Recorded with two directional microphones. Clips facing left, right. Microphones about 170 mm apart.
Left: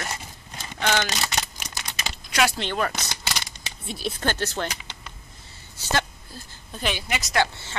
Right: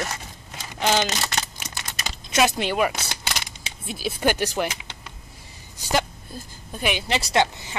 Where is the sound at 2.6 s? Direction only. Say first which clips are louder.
Right 4 dB; 10° right (ahead or behind).